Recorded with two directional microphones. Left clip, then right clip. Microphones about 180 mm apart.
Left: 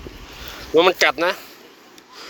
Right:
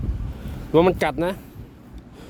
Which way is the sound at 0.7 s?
25° right (ahead or behind).